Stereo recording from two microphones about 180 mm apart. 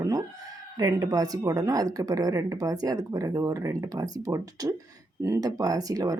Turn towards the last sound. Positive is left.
turn(degrees=-20)  # may be behind; listen again after turning